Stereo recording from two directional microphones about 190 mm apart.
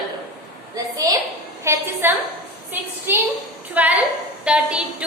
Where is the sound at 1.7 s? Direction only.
15° right (ahead or behind).